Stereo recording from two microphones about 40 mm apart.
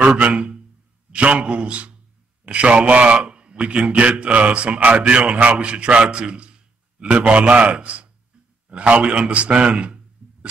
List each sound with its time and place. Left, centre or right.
0.2 s a man's voice: right